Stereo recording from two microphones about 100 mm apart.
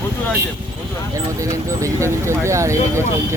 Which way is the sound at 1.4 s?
30° right (ahead or behind).